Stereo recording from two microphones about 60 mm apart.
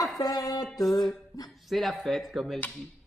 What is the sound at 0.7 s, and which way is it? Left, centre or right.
Music, left.